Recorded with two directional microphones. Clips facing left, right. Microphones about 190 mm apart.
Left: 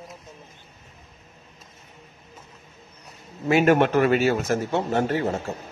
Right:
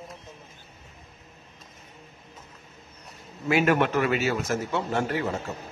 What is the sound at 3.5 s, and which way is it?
Speech, 25° left (ahead or behind).